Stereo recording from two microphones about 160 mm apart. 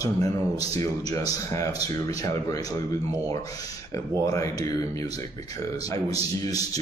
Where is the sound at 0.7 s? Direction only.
20° left (ahead or behind).